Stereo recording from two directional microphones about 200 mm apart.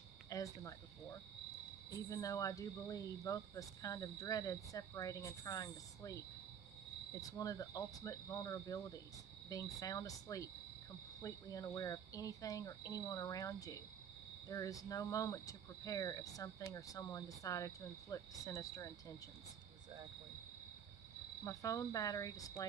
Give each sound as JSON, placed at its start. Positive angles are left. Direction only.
{"t": 0.3, "sound": "speech", "side_deg": 15}
{"t": 21.5, "sound": "speech", "side_deg": 15}